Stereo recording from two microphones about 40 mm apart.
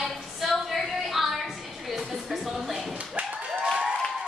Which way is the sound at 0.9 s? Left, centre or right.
Centre.